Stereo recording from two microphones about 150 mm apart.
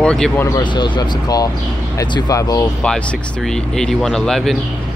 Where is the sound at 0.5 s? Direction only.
30° left (ahead or behind).